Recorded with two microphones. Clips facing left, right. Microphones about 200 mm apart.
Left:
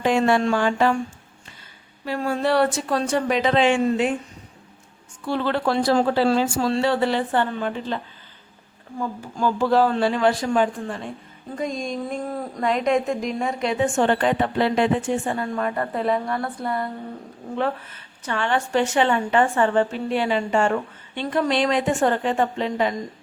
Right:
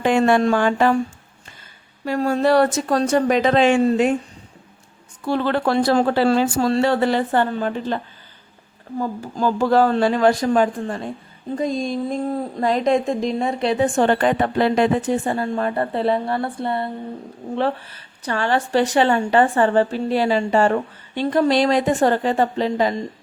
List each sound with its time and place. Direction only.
0.0 s a sound: 55° right (ahead or behind)
0.4 s speech: 50° right (ahead or behind)
2.0 s speech: 40° right (ahead or behind)
5.2 s speech: 45° right (ahead or behind)